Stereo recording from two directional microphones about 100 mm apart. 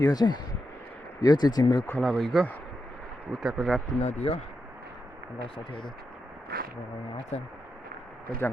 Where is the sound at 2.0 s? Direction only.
Centre (ahead or behind).